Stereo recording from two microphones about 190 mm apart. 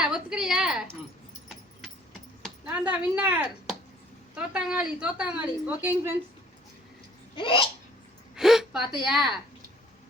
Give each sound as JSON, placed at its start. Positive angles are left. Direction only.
{"t": 0.0, "sound": "a woman's voice", "side_deg": -5}
{"t": 2.4, "sound": "a sound", "side_deg": -5}
{"t": 3.2, "sound": "a woman's voice", "side_deg": -10}
{"t": 7.3, "sound": "hiccup", "side_deg": 25}
{"t": 8.4, "sound": "a woman's voice", "side_deg": 0}